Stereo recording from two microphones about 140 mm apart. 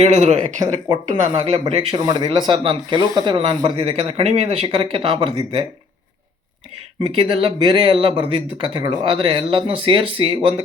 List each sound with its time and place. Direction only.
0.0 s speech: 50° right (ahead or behind)
0.6 s speech: 25° right (ahead or behind)
1.5 s speech: 45° right (ahead or behind)
7.0 s speech: 40° right (ahead or behind)